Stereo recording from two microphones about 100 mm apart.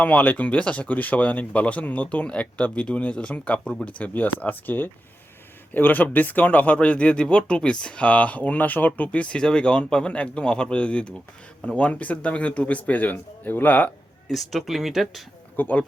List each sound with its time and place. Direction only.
0.0 s speech: 15° left (ahead or behind)
14.3 s speech: centre (ahead or behind)
15.5 s speech: 15° left (ahead or behind)